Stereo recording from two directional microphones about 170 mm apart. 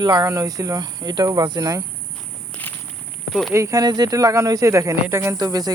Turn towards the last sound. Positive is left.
turn(degrees=-20)  # may be behind; listen again after turning